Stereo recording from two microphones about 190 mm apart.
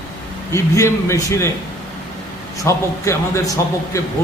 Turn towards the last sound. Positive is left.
turn(degrees=15)  # may be behind; listen again after turning